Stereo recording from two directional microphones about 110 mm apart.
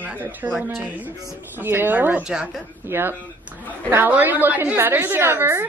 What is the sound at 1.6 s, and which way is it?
A woman's voice, 20° right (ahead or behind).